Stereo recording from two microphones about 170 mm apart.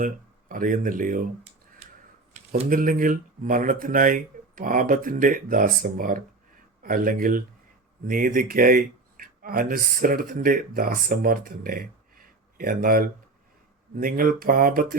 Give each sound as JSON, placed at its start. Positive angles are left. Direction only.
{"t": 0.0, "sound": "speech", "side_deg": -50}
{"t": 2.6, "sound": "speech", "side_deg": -55}